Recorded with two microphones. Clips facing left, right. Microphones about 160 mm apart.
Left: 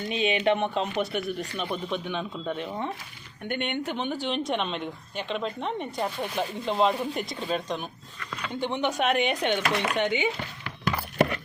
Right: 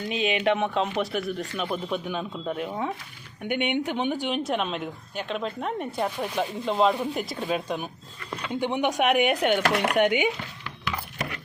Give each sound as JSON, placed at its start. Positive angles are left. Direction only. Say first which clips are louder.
{"t": 0.0, "sound": "speech", "louder": "even", "side_deg": 0}
{"t": 9.6, "sound": "speech", "louder": "right 3 dB", "side_deg": -60}
{"t": 10.0, "sound": "speech", "louder": "right 6 dB", "side_deg": -10}